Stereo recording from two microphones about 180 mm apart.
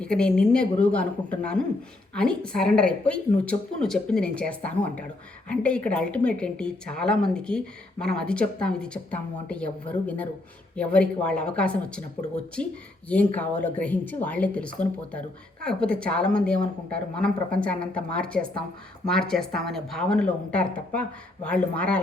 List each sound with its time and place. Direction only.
0.0 s a woman's voice: 5° left (ahead or behind)
13.1 s a woman's voice: 10° left (ahead or behind)